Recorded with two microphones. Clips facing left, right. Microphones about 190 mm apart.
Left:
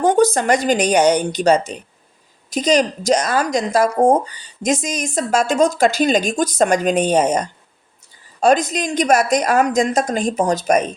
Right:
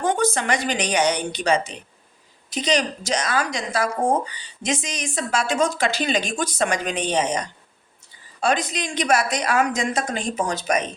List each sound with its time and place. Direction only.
0.0 s a woman's voice: 40° left (ahead or behind)